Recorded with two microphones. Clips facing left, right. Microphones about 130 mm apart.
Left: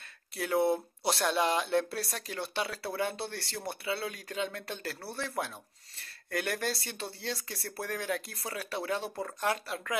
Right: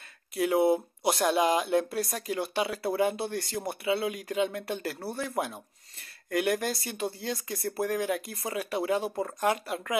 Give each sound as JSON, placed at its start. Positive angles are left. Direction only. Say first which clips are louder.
{"t": 0.4, "sound": "speech", "louder": "right 4 dB", "side_deg": -5}
{"t": 6.7, "sound": "speech", "louder": "right 3 dB", "side_deg": 0}
{"t": 7.0, "sound": "speech", "louder": "right 8 dB", "side_deg": -15}
{"t": 7.2, "sound": "speech", "louder": "right 4 dB", "side_deg": -5}
{"t": 7.5, "sound": "speech", "louder": "right 8 dB", "side_deg": -20}